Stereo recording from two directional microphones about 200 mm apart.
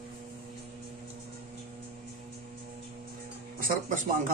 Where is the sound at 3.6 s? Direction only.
45° right (ahead or behind).